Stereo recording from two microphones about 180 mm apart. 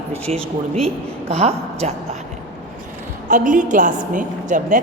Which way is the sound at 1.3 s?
35° right (ahead or behind).